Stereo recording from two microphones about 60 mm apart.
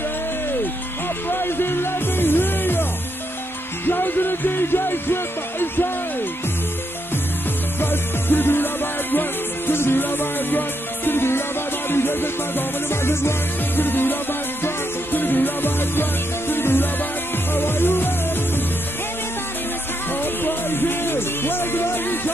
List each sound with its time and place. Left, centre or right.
1.3 s music: left
7.8 s music: left
15.1 s music: left
20.4 s music: left